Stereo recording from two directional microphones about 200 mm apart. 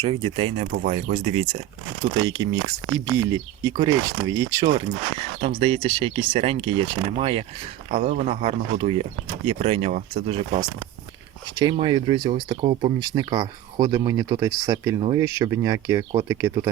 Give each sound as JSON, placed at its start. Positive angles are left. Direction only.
{"t": 0.0, "sound": "speech", "side_deg": -30}
{"t": 2.2, "sound": "speech", "side_deg": -20}
{"t": 5.4, "sound": "speech", "side_deg": -30}